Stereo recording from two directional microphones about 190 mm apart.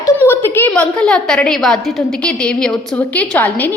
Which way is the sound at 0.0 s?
10° left (ahead or behind).